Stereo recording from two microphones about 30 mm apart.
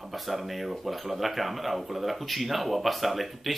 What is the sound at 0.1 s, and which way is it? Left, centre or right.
Speech, centre.